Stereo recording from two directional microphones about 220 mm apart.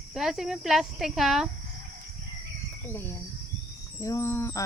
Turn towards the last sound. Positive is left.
turn(degrees=10)  # may be behind; listen again after turning